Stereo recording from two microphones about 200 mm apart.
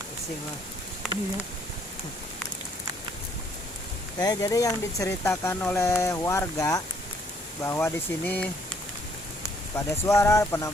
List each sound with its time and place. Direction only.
4.2 s speech: 20° left (ahead or behind)
9.7 s speech: 15° left (ahead or behind)